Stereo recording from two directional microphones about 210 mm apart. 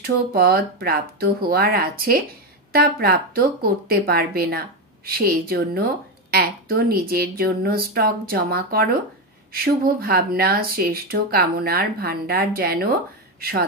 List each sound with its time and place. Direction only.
0.0 s speech: 45° right (ahead or behind)